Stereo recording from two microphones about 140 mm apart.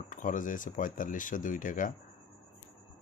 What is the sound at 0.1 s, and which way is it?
Speech, 70° left (ahead or behind).